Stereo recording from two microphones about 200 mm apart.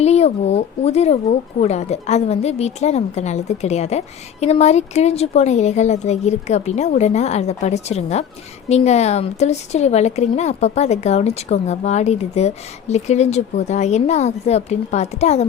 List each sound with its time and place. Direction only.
0.0 s speech: 30° left (ahead or behind)